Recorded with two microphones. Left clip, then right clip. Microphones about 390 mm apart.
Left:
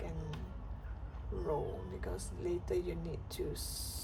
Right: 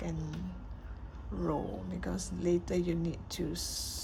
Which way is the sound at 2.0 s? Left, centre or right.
Centre.